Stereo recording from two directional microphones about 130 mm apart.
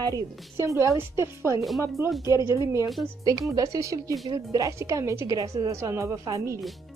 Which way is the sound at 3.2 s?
25° right (ahead or behind).